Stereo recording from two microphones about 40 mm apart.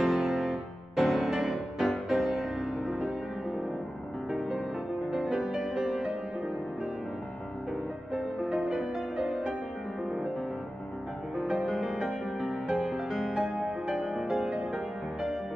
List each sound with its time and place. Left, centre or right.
0.0 s music: centre
4.3 s music: centre
8.1 s music: centre
11.4 s music: centre
13.4 s music: centre
14.5 s music: right